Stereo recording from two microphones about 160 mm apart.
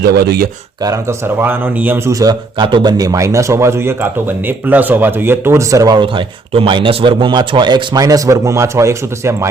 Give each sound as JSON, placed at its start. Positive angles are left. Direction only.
{"t": 0.0, "sound": "speech", "side_deg": -90}
{"t": 0.8, "sound": "speech", "side_deg": -20}